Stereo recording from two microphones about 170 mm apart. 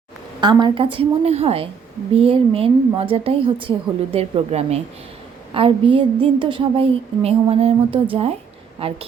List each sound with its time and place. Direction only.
0.4 s a woman's voice: 25° right (ahead or behind)